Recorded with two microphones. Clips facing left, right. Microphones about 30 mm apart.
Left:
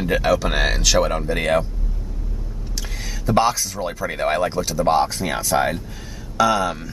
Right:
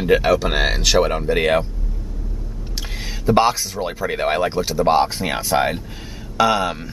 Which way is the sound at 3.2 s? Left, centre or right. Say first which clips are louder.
Right 2 dB; right.